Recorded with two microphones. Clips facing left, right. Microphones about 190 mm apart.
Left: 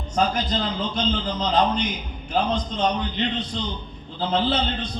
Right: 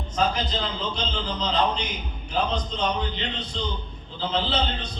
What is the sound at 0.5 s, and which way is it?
A man's voice, 50° left (ahead or behind).